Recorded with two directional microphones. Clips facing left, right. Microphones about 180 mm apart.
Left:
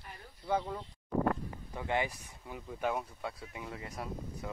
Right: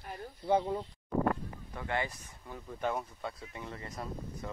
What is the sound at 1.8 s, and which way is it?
Speech, 15° left (ahead or behind).